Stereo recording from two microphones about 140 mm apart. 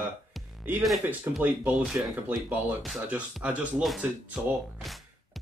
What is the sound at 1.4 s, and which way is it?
Speech, 10° right (ahead or behind).